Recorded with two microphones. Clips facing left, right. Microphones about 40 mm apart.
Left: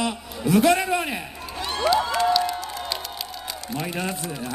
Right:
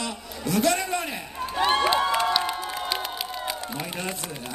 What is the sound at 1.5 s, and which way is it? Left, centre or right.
Cheering, right.